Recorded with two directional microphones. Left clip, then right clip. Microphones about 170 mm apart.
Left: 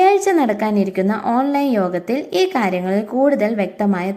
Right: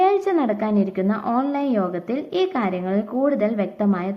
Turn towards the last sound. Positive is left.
turn(degrees=40)  # may be behind; listen again after turning